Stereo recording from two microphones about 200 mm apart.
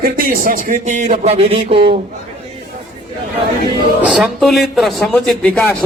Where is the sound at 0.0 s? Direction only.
45° right (ahead or behind); by 2.0 s 25° right (ahead or behind).